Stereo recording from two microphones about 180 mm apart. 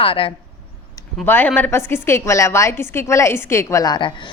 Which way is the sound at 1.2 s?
10° left (ahead or behind).